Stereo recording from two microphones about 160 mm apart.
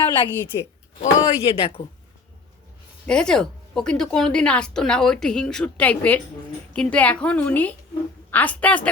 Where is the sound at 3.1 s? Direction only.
5° left (ahead or behind).